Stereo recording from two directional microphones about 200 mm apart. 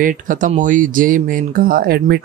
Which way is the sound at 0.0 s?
40° right (ahead or behind).